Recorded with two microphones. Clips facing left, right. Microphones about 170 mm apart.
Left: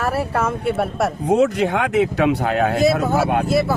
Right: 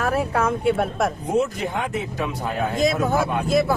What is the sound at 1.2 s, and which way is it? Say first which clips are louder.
Speech: left 10 dB; 75° left (ahead or behind).